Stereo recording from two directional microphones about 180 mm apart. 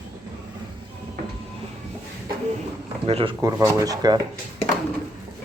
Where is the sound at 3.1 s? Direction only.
30° right (ahead or behind).